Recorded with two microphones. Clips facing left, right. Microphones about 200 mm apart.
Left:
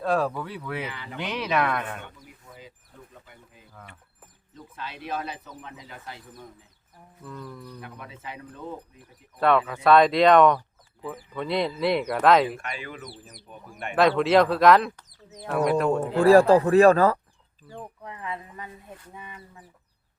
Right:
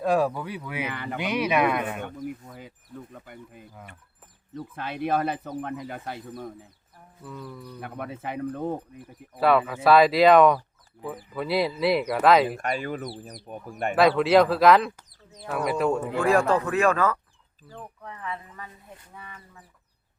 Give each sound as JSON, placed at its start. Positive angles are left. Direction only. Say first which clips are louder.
{"t": 0.0, "sound": "speech", "louder": "right 2 dB", "side_deg": -10}
{"t": 0.9, "sound": "speech", "louder": "right 5 dB", "side_deg": -55}
{"t": 1.2, "sound": "speech", "louder": "right 3 dB", "side_deg": -10}
{"t": 2.0, "sound": "speech", "louder": "right 11 dB", "side_deg": -50}
{"t": 7.3, "sound": "speech", "louder": "even", "side_deg": 0}
{"t": 7.8, "sound": "speech", "louder": "right 7 dB", "side_deg": -55}
{"t": 9.4, "sound": "speech", "louder": "right 1 dB", "side_deg": -5}
{"t": 12.5, "sound": "speech", "louder": "right 6 dB", "side_deg": -45}
{"t": 13.9, "sound": "speech", "louder": "right 1 dB", "side_deg": 0}
{"t": 16.2, "sound": "speech", "louder": "left 7 dB", "side_deg": 35}
{"t": 17.7, "sound": "speech", "louder": "left 2 dB", "side_deg": 15}